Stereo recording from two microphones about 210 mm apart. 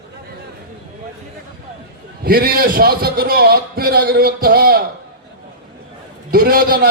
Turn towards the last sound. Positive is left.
turn(degrees=-45)  # may be behind; listen again after turning